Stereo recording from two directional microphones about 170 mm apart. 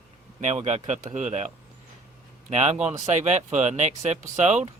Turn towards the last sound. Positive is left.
turn(degrees=-45)  # may be behind; listen again after turning